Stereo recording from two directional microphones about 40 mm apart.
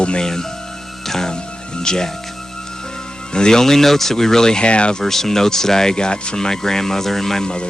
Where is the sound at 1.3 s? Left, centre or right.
Centre.